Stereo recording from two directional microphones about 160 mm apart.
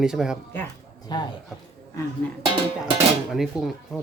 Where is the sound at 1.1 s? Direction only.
25° left (ahead or behind).